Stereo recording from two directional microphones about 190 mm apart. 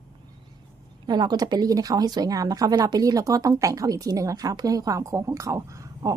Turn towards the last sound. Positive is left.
turn(degrees=-15)  # may be behind; listen again after turning